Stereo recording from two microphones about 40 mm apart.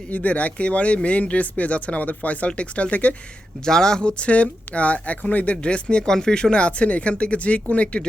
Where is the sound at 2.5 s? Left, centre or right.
Left.